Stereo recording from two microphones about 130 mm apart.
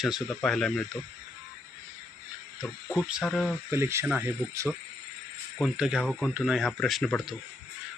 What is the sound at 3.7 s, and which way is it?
Speech, 20° right (ahead or behind).